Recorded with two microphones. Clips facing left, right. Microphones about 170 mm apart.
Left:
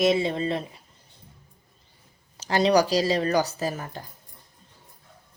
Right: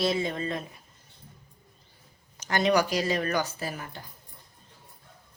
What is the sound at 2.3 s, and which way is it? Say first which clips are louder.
Speech: left 4 dB; 30° left (ahead or behind).